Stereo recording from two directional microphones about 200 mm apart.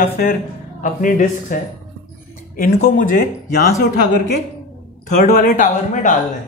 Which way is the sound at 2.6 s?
45° left (ahead or behind).